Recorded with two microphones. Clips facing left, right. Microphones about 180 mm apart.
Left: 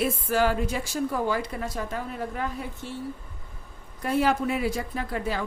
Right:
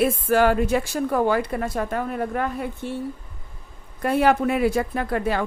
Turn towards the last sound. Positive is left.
turn(degrees=-60)  # may be behind; listen again after turning